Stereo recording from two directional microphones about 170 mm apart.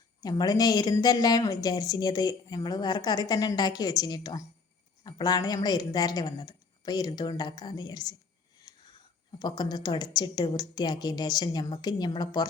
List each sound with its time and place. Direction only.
0.2 s speech: 25° left (ahead or behind)
8.7 s whispering: 20° left (ahead or behind)
9.4 s speech: 25° left (ahead or behind)